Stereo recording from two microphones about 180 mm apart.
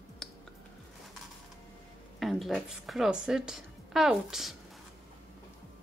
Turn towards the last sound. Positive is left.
turn(degrees=0)  # may be behind; listen again after turning